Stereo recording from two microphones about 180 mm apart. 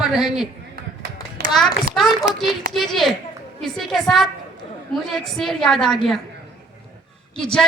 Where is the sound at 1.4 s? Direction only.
65° right (ahead or behind).